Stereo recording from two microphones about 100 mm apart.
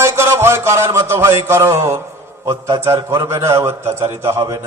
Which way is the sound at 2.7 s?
35° right (ahead or behind).